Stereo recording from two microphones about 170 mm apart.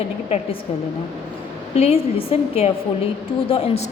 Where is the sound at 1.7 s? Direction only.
35° left (ahead or behind).